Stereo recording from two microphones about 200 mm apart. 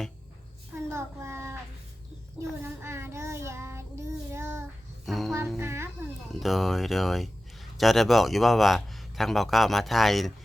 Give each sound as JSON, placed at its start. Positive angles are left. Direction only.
{"t": 0.9, "sound": "child singing", "side_deg": -15}
{"t": 2.8, "sound": "child singing", "side_deg": -15}
{"t": 5.0, "sound": "speech", "side_deg": 0}
{"t": 5.5, "sound": "a sound", "side_deg": -15}
{"t": 6.3, "sound": "speech", "side_deg": 0}